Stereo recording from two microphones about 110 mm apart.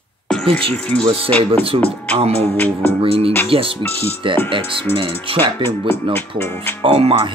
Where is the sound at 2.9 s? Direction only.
60° right (ahead or behind).